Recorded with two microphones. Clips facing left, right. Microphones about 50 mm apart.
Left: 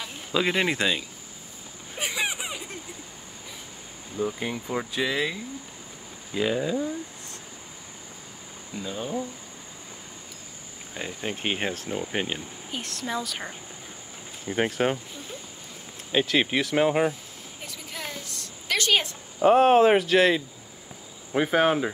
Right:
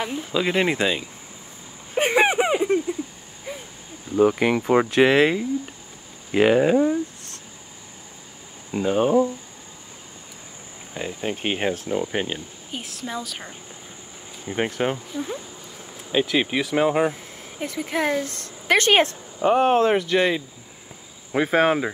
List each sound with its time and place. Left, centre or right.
0.3 s speech: centre
0.6 s speech: centre
2.0 s a sound: right
4.2 s speech: right
8.7 s speech: right
11.0 s speech: centre
14.5 s speech: centre
16.1 s speech: centre
17.1 s speech: right
19.4 s speech: centre